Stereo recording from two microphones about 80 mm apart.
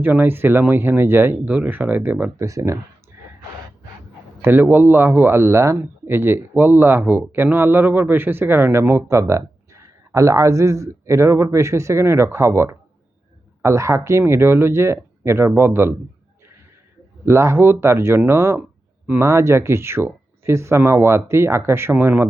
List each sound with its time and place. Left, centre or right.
0.0 s speech: right
2.4 s a man's voice: right
3.1 s gasp: right
4.4 s a man's voice: right
17.2 s a man's voice: right